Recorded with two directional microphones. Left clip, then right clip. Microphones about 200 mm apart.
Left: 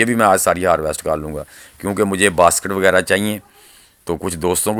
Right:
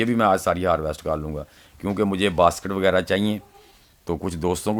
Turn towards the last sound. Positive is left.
turn(degrees=15)  # may be behind; listen again after turning